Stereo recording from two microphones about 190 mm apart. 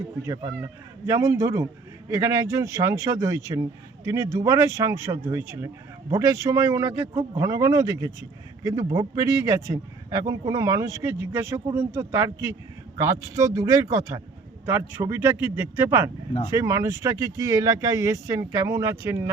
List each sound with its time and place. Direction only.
0.6 s speech: 15° right (ahead or behind)